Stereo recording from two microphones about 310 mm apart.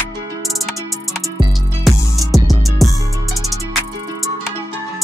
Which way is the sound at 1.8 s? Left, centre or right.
Centre.